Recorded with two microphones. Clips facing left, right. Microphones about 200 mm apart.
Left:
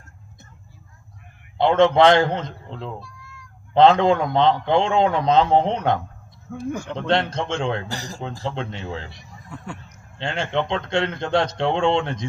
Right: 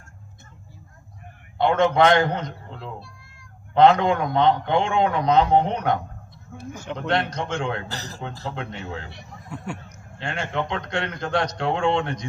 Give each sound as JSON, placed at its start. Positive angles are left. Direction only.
{"t": 1.5, "sound": "a man's voice", "side_deg": 25}
{"t": 6.5, "sound": "speech", "side_deg": 60}
{"t": 7.1, "sound": "a man's voice", "side_deg": 25}
{"t": 7.9, "sound": "speech", "side_deg": 10}
{"t": 8.4, "sound": "a man's voice", "side_deg": 30}
{"t": 10.2, "sound": "a man's voice", "side_deg": 25}